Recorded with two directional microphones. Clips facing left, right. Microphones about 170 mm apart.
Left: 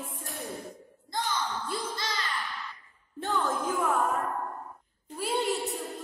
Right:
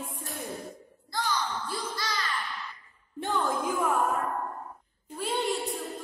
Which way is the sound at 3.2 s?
15° right (ahead or behind).